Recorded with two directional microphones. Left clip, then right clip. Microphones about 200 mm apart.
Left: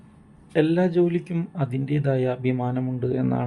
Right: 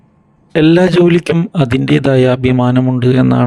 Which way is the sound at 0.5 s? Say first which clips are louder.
Right 12 dB; 50° right (ahead or behind).